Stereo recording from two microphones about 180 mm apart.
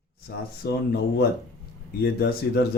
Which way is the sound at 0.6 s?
60° left (ahead or behind).